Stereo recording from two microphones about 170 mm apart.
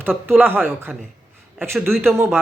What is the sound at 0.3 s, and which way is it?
Speech, 10° right (ahead or behind).